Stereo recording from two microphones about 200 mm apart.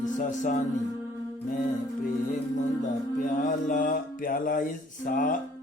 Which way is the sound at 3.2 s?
40° left (ahead or behind).